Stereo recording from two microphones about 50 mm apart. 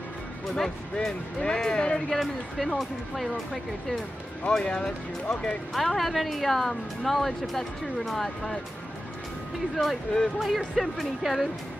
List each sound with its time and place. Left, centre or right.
0.9 s speech: centre
2.0 s a woman's voice: centre
4.5 s speech: centre
5.7 s a woman's voice: centre
9.8 s a woman's voice: centre